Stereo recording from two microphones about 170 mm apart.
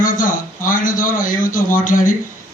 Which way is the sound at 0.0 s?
55° left (ahead or behind).